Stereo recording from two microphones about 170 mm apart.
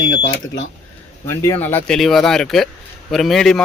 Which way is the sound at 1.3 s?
15° left (ahead or behind).